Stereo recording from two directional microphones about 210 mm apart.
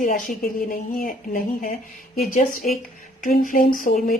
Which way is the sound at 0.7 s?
40° left (ahead or behind).